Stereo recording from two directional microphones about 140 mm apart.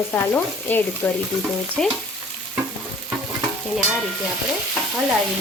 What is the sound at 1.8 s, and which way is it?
Frying, 5° left (ahead or behind).